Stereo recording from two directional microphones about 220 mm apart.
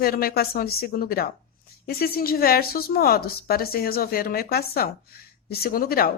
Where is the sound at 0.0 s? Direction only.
45° left (ahead or behind).